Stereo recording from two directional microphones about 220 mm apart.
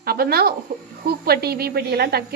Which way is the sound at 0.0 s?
45° right (ahead or behind).